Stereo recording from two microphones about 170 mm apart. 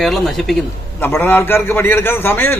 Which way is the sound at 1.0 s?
10° left (ahead or behind).